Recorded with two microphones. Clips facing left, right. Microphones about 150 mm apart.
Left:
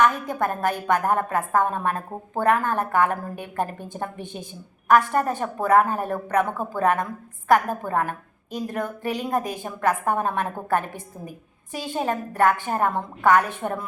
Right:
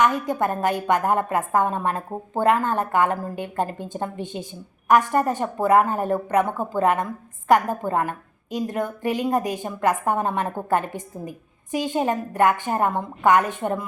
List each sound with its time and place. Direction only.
0.0 s a woman's voice: 15° right (ahead or behind)